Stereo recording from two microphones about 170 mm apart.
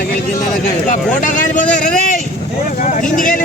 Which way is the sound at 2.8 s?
50° left (ahead or behind).